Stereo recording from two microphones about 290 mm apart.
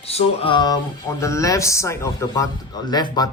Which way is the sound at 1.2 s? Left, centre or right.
Centre.